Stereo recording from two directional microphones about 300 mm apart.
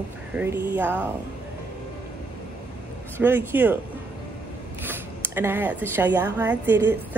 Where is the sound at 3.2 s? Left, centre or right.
Centre.